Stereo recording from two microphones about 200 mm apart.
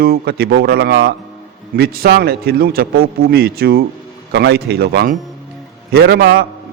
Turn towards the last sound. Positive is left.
turn(degrees=-50)  # may be behind; listen again after turning